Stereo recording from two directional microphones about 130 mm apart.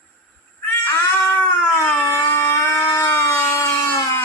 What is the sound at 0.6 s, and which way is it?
Cat, 15° left (ahead or behind).